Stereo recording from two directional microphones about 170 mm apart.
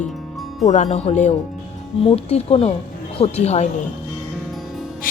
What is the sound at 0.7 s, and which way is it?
Speech, 40° left (ahead or behind).